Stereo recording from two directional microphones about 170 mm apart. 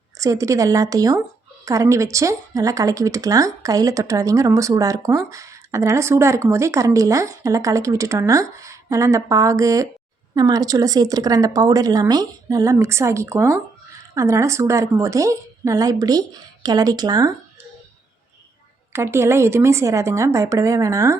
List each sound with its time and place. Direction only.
0.2 s a woman's voice: 20° right (ahead or behind)
18.9 s speech: 15° right (ahead or behind)